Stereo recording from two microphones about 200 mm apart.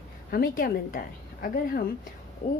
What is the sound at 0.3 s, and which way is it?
A woman's voice, 45° left (ahead or behind).